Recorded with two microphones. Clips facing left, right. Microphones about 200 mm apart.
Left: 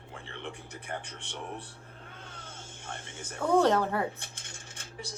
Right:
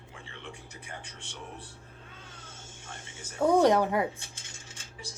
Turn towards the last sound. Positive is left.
turn(degrees=60)  # may be behind; listen again after turning